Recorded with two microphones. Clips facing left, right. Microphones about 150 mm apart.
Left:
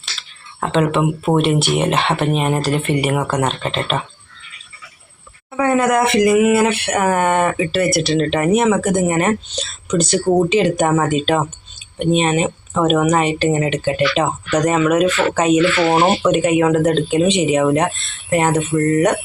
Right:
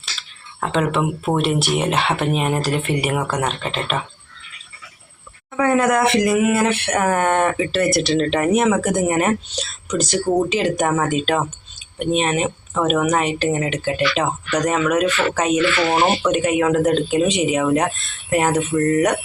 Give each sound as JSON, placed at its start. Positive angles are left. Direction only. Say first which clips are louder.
{"t": 0.0, "sound": "a sound", "louder": "even", "side_deg": 0}
{"t": 1.4, "sound": "speech", "louder": "left 3 dB", "side_deg": 0}
{"t": 5.7, "sound": "speech", "louder": "left 2 dB", "side_deg": 5}
{"t": 15.8, "sound": "speech", "louder": "left 3 dB", "side_deg": 20}
{"t": 16.3, "sound": "speech", "louder": "left 3 dB", "side_deg": 0}
{"t": 18.7, "sound": "speech", "louder": "left 2 dB", "side_deg": 20}